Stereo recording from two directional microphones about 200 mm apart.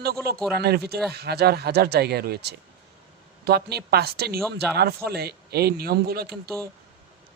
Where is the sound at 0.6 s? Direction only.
55° right (ahead or behind).